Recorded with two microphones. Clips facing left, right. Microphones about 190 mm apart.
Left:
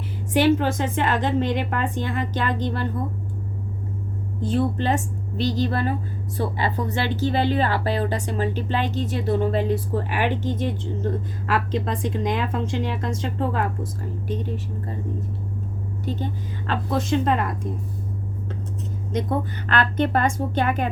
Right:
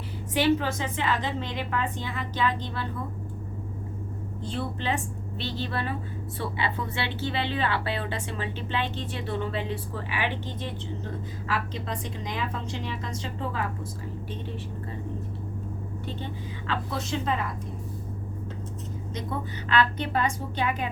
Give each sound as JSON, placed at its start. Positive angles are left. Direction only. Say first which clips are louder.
{"t": 0.3, "sound": "a woman's voice", "louder": "left 5 dB", "side_deg": 50}
{"t": 4.4, "sound": "a woman's voice", "louder": "left 8 dB", "side_deg": 45}
{"t": 11.4, "sound": "a woman's voice", "louder": "left 7 dB", "side_deg": 60}
{"t": 14.3, "sound": "a woman's voice", "louder": "left 11 dB", "side_deg": 40}
{"t": 16.0, "sound": "a woman's voice", "louder": "left 8 dB", "side_deg": 40}
{"t": 19.6, "sound": "a woman's voice", "louder": "left 2 dB", "side_deg": 55}